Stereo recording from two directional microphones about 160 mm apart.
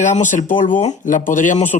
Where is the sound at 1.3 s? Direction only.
55° left (ahead or behind).